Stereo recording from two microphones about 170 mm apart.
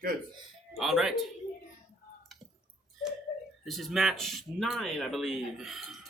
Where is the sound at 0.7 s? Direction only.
Centre (ahead or behind).